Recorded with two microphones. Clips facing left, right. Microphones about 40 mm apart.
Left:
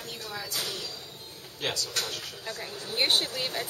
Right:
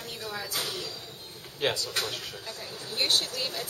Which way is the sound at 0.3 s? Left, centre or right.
Centre.